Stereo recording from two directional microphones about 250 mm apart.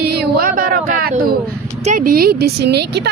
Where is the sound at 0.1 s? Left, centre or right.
Right.